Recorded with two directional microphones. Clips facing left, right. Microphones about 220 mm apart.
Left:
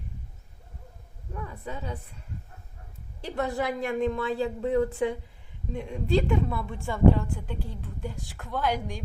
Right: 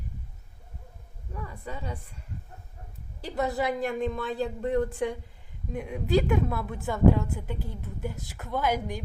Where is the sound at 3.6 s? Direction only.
Centre (ahead or behind).